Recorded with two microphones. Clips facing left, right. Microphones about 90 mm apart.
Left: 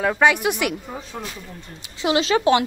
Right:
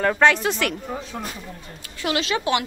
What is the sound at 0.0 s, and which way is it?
Speech, 10° left (ahead or behind).